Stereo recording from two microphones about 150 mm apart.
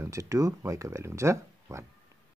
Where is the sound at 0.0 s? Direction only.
20° right (ahead or behind).